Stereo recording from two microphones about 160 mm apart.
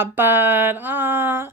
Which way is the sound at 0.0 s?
15° right (ahead or behind).